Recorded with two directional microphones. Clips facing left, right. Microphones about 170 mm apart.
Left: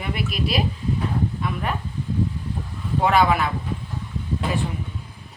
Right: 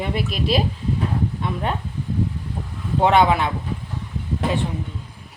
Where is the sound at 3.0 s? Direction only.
25° right (ahead or behind).